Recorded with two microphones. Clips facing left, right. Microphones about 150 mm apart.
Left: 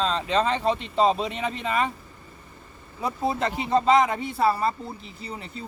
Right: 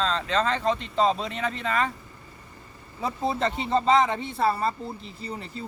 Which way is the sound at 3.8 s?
5° left (ahead or behind).